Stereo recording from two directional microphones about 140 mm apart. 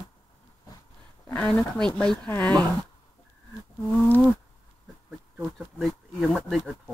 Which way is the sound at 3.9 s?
10° left (ahead or behind).